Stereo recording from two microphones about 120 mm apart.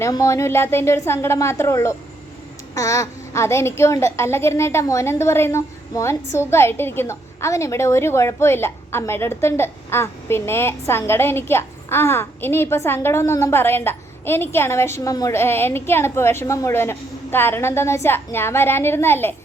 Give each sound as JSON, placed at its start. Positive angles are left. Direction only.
{"t": 0.1, "sound": "a child's voice", "side_deg": 25}